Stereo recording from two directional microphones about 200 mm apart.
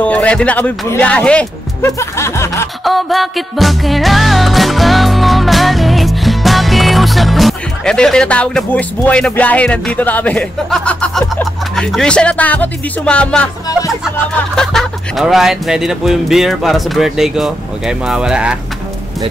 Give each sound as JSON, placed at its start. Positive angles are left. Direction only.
{"t": 0.0, "sound": "speech", "side_deg": 5}
{"t": 2.8, "sound": "music", "side_deg": 0}
{"t": 14.0, "sound": "speech", "side_deg": 0}